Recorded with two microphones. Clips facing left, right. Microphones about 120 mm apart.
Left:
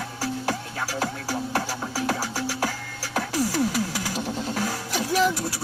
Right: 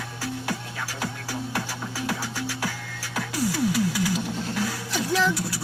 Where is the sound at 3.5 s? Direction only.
40° left (ahead or behind).